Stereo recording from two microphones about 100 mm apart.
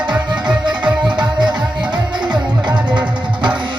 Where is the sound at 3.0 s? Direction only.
50° right (ahead or behind).